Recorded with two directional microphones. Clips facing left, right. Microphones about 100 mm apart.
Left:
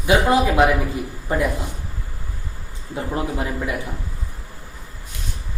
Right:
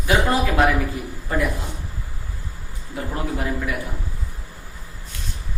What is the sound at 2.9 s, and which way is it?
Speech, 20° left (ahead or behind).